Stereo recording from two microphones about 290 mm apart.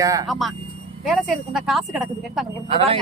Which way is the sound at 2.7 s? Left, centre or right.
Right.